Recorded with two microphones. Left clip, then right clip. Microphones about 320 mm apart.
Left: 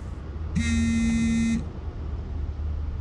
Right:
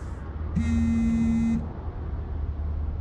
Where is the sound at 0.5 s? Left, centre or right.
Left.